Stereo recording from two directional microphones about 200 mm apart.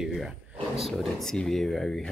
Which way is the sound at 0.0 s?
Centre (ahead or behind).